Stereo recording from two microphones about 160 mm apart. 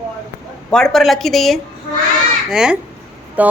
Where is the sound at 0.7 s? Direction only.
Centre (ahead or behind).